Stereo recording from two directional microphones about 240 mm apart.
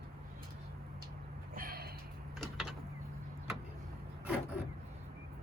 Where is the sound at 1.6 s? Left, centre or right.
Right.